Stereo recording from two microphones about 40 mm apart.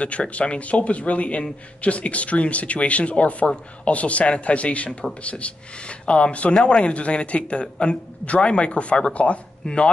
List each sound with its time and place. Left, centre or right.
0.0 s a man's voice: left